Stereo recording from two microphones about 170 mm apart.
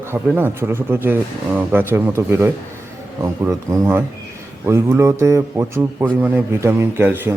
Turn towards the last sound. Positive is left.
turn(degrees=-10)  # may be behind; listen again after turning